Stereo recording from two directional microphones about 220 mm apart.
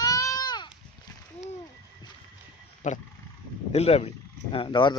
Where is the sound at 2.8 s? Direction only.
35° left (ahead or behind).